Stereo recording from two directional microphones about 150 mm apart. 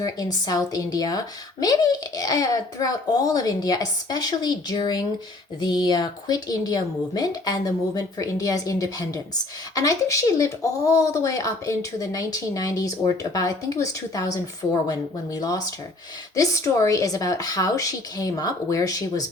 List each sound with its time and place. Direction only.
0.4 s a child's voice: 25° left (ahead or behind)